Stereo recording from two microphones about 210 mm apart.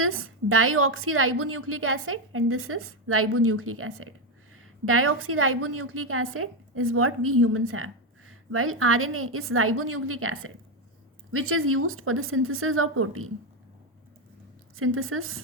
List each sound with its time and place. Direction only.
0.0 s a woman's voice: 75° right (ahead or behind)
14.8 s a woman's voice: 75° right (ahead or behind)